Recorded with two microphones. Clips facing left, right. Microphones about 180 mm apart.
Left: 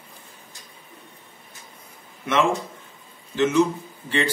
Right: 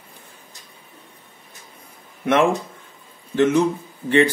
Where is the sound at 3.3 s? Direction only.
55° right (ahead or behind).